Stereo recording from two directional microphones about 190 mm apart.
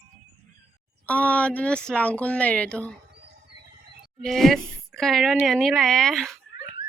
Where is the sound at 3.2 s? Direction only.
60° right (ahead or behind).